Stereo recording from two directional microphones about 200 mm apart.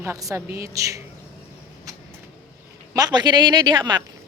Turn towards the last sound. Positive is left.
turn(degrees=-20)  # may be behind; listen again after turning